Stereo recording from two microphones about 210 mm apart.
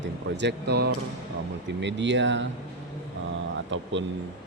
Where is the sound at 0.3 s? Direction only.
55° right (ahead or behind).